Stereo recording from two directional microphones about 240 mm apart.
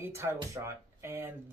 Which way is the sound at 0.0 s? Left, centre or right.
Centre.